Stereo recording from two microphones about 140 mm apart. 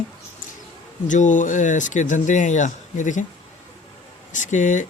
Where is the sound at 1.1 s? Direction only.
65° left (ahead or behind).